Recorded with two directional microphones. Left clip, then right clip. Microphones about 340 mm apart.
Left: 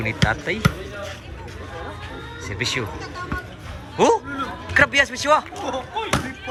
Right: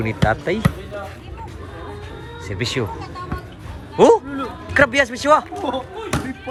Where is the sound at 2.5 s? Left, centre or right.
Centre.